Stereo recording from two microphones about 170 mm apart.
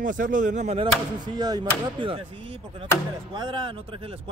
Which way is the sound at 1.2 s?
25° right (ahead or behind).